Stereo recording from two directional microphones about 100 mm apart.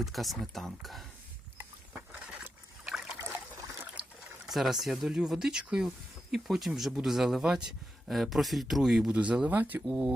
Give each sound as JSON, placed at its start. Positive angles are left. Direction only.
{"t": 0.0, "sound": "speech", "side_deg": 0}
{"t": 2.8, "sound": "boat", "side_deg": -5}
{"t": 3.2, "sound": "trickle", "side_deg": -25}
{"t": 4.4, "sound": "speech", "side_deg": 0}